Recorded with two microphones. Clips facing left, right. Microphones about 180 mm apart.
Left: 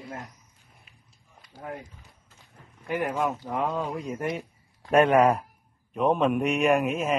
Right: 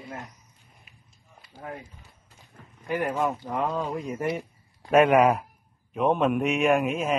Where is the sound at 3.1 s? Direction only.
15° right (ahead or behind).